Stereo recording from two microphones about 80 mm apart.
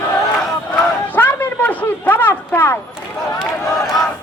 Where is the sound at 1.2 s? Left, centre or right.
Left.